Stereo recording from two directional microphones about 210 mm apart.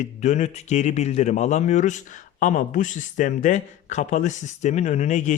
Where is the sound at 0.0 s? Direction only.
35° left (ahead or behind).